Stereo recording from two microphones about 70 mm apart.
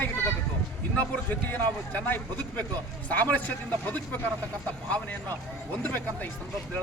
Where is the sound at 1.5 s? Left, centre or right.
Left.